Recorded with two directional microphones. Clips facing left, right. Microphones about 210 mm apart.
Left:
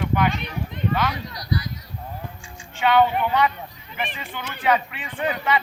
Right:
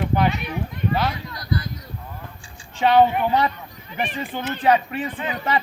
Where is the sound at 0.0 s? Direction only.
35° right (ahead or behind).